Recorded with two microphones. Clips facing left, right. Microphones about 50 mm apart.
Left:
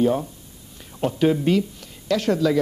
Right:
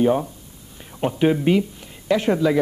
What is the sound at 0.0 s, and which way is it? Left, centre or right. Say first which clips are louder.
Speech: right 2 dB; right.